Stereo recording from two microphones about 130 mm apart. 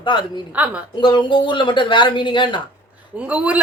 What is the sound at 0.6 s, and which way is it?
Speech, 10° right (ahead or behind).